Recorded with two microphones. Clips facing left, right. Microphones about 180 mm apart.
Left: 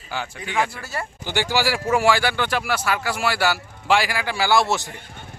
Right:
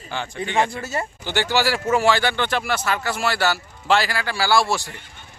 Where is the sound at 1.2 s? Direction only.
15° left (ahead or behind).